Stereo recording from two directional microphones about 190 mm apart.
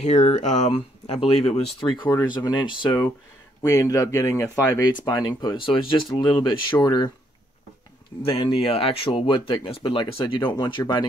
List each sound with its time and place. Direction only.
0.0 s speech: 35° left (ahead or behind)
8.2 s speech: 30° left (ahead or behind)